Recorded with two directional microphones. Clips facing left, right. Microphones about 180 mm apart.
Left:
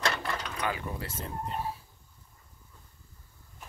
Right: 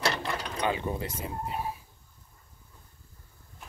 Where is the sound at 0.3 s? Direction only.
25° right (ahead or behind).